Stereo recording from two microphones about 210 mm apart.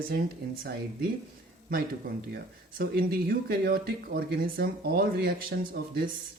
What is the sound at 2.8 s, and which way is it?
Speech, 45° right (ahead or behind).